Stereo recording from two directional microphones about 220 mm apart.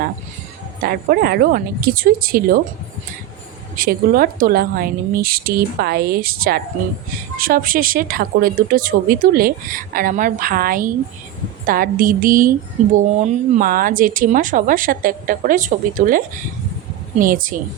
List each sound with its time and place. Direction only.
0.8 s speech: 45° right (ahead or behind)
3.8 s a woman's voice: 40° right (ahead or behind)